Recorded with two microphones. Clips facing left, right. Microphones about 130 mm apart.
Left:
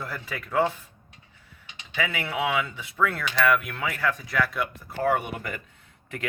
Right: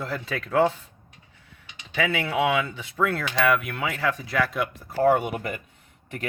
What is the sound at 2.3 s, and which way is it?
Speech, 30° right (ahead or behind).